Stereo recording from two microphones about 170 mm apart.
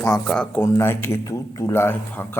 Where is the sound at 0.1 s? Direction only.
5° left (ahead or behind).